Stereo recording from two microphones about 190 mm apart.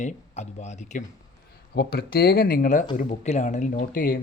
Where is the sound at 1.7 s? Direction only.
55° left (ahead or behind).